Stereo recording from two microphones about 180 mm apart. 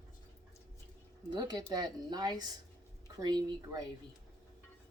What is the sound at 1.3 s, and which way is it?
Speech, 20° right (ahead or behind).